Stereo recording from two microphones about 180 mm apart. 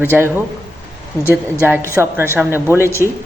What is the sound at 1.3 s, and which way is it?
A man's voice, 10° right (ahead or behind).